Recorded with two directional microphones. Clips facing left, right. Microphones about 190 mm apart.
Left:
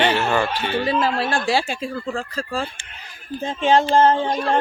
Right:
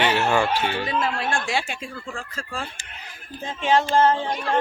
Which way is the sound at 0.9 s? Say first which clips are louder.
Left 4 dB; 35° left (ahead or behind).